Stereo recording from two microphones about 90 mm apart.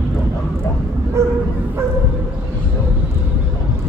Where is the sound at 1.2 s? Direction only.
30° right (ahead or behind).